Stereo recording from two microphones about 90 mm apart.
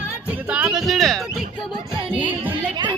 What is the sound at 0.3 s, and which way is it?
Music, 15° right (ahead or behind).